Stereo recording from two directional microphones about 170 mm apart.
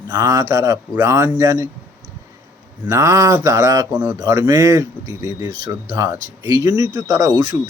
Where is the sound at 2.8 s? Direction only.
15° right (ahead or behind).